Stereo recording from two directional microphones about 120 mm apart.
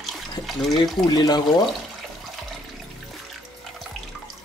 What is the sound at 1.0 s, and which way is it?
Speech, 35° left (ahead or behind).